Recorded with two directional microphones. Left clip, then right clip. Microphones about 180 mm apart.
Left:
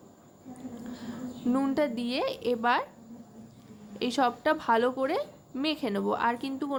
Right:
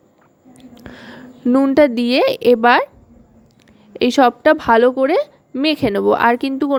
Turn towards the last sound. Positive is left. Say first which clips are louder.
# right 14 dB
turn(degrees=-45)  # may be behind; listen again after turning